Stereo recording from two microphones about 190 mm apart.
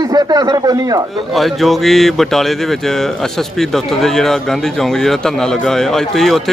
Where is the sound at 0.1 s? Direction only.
20° right (ahead or behind).